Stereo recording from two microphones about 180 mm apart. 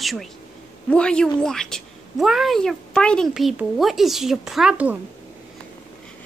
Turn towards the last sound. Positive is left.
turn(degrees=-5)  # may be behind; listen again after turning